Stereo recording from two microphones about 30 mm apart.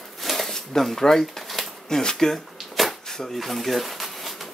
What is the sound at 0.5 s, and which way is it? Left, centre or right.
Speech, centre.